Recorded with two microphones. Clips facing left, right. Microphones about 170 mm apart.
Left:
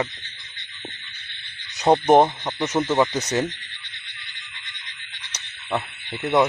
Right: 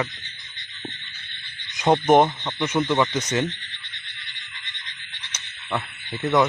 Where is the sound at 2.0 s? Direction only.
35° left (ahead or behind).